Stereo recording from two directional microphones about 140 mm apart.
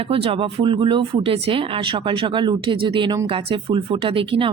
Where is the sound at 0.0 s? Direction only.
45° right (ahead or behind).